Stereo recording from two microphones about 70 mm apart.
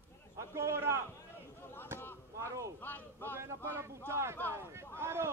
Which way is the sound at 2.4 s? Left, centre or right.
Right.